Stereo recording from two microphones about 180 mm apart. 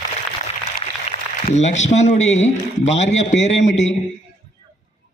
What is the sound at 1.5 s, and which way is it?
Speech, 40° left (ahead or behind).